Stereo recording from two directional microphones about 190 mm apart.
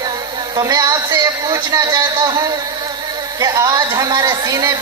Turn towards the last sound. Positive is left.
turn(degrees=-20)  # may be behind; listen again after turning